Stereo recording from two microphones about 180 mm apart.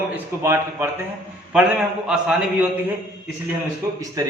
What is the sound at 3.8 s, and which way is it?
Speech, 15° right (ahead or behind).